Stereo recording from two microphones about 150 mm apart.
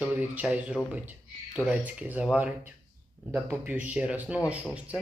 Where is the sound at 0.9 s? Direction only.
10° right (ahead or behind).